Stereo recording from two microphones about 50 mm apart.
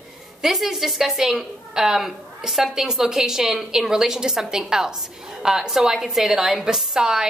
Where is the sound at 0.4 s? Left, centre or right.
Centre.